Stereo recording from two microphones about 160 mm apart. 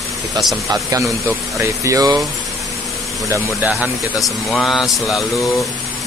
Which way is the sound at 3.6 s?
5° right (ahead or behind).